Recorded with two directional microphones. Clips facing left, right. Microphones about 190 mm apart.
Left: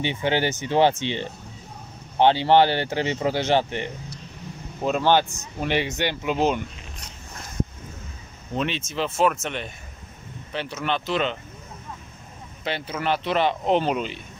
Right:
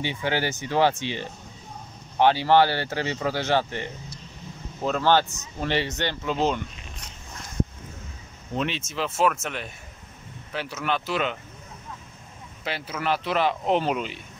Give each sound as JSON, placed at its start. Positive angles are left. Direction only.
{"t": 0.0, "sound": "speech", "side_deg": 25}
{"t": 8.5, "sound": "speech", "side_deg": -5}
{"t": 12.6, "sound": "speech", "side_deg": -5}